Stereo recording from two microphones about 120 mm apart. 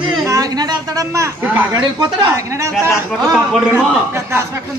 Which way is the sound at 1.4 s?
15° right (ahead or behind).